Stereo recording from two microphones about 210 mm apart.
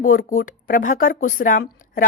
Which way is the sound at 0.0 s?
40° left (ahead or behind).